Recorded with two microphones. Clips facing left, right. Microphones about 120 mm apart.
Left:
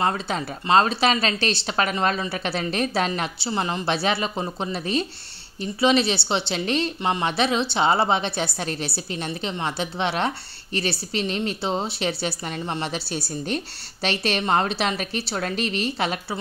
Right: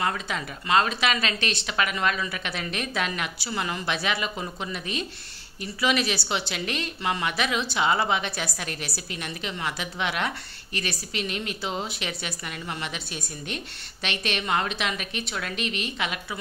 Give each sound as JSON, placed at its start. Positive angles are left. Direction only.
{"t": 0.0, "sound": "a woman's voice", "side_deg": 30}